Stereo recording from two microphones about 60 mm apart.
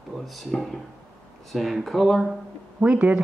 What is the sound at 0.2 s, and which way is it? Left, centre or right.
Speech, centre.